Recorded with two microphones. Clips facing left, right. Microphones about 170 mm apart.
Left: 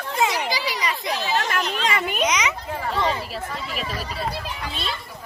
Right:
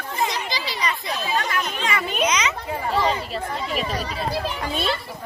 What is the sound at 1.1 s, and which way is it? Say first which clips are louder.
Chatter: left 2 dB; 80° left.